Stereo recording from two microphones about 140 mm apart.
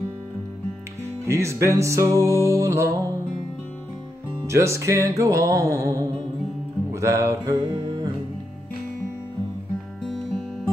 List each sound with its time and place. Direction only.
1.2 s music: 20° right (ahead or behind)
4.5 s music: 20° right (ahead or behind)